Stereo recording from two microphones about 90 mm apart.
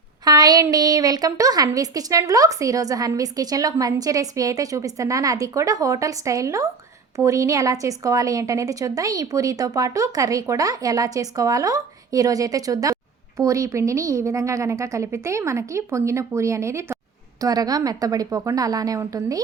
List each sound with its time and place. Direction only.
0.3 s a sound: 45° right (ahead or behind)
0.6 s speech: 45° right (ahead or behind)
17.4 s speech: 45° right (ahead or behind)